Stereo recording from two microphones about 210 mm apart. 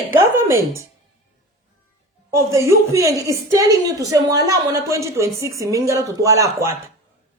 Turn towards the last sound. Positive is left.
turn(degrees=-15)  # may be behind; listen again after turning